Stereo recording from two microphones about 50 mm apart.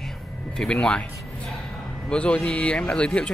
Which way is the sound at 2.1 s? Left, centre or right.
Left.